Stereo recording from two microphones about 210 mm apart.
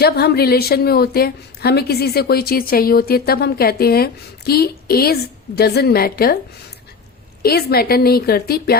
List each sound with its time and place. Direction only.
0.0 s a woman's voice: 50° left (ahead or behind)
7.4 s a woman's voice: 50° left (ahead or behind)